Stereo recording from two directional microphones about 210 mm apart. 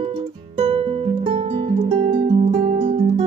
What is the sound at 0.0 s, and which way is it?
Music, 25° right (ahead or behind).